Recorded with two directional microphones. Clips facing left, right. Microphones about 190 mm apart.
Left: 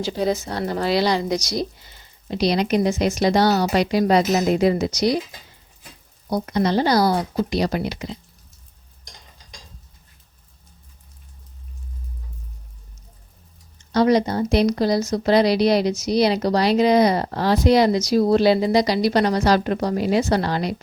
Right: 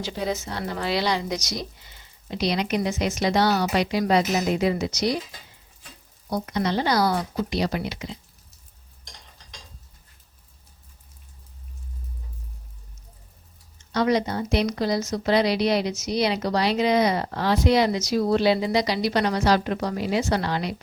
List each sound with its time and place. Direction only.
0.0 s speech: 35° left (ahead or behind)
6.3 s speech: 40° left (ahead or behind)
13.9 s speech: 35° left (ahead or behind)